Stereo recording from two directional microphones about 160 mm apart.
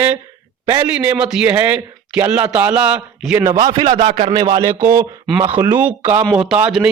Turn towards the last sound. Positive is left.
turn(degrees=-5)  # may be behind; listen again after turning